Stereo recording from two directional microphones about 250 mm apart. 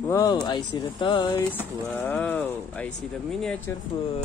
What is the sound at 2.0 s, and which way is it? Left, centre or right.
Speech, centre.